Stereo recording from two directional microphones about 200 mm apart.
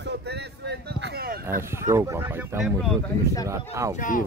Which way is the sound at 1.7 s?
15° right (ahead or behind).